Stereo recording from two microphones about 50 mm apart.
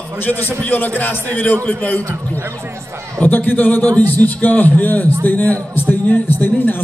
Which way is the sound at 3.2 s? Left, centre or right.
Left.